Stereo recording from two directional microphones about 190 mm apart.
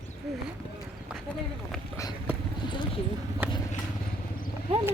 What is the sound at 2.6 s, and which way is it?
Vehicle, 25° left (ahead or behind).